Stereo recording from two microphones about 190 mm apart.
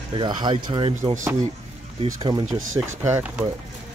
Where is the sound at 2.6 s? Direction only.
90° right.